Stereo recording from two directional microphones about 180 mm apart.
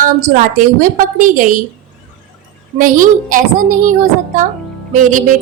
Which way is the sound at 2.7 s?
45° right (ahead or behind).